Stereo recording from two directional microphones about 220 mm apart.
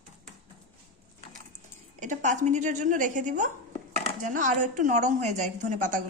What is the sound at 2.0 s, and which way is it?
A woman's voice, 35° right (ahead or behind).